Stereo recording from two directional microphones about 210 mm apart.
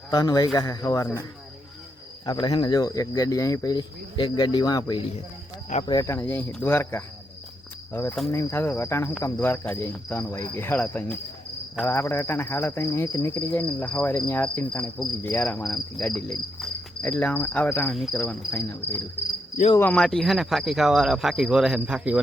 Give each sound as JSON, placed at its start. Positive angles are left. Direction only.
{"t": 0.1, "sound": "cricket", "side_deg": 20}
{"t": 2.2, "sound": "speech", "side_deg": 20}
{"t": 5.8, "sound": "cricket", "side_deg": 20}
{"t": 19.7, "sound": "speech", "side_deg": 5}